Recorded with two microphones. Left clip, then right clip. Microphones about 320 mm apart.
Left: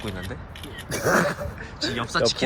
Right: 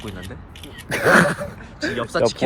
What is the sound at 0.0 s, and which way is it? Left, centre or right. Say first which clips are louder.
Speech: left 1 dB; centre.